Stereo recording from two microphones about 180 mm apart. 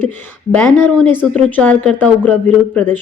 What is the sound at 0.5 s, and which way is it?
Speech, 10° left (ahead or behind).